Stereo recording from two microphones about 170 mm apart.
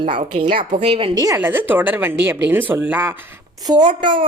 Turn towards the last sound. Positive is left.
turn(degrees=-30)  # may be behind; listen again after turning